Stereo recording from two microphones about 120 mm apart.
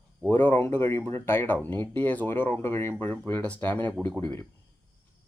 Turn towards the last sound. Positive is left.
turn(degrees=20)  # may be behind; listen again after turning